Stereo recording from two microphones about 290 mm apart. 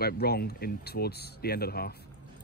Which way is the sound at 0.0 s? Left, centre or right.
Left.